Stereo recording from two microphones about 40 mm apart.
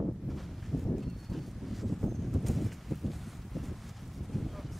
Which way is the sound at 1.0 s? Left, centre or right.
Centre.